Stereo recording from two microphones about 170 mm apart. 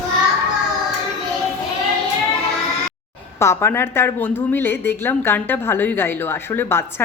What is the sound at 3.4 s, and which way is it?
A woman's voice, 15° left (ahead or behind).